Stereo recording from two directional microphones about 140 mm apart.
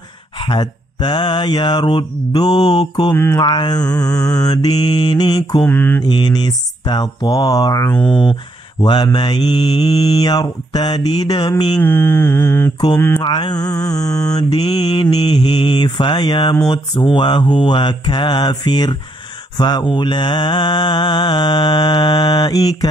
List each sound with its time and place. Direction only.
0.4 s mantra: 35° left (ahead or behind)
4.0 s speech: 25° left (ahead or behind)
5.7 s mantra: 10° left (ahead or behind)
6.0 s speech: 30° left (ahead or behind)
8.1 s mantra: 35° left (ahead or behind)
9.8 s speech: 25° left (ahead or behind)
11.8 s mantra: 15° left (ahead or behind)
13.2 s speech: 30° left (ahead or behind)
14.7 s mantra: 30° left (ahead or behind)
16.6 s speech: 30° left (ahead or behind)
17.1 s mantra: 35° left (ahead or behind)